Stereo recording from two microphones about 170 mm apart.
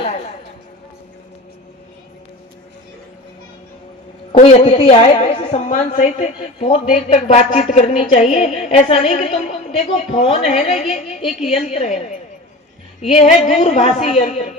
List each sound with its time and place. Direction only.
4.4 s a woman's voice: 35° left (ahead or behind)
5.6 s a woman's voice: 45° left (ahead or behind)